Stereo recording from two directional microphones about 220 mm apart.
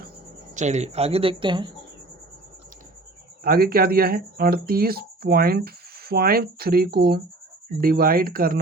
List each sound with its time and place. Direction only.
0.5 s speech: 30° right (ahead or behind)
3.4 s speech: 45° right (ahead or behind)